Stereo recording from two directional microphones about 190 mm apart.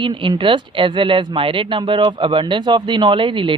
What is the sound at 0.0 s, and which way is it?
Speech, 25° right (ahead or behind).